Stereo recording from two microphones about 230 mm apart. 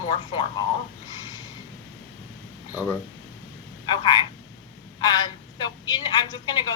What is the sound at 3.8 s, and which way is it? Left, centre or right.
A woman's voice, centre.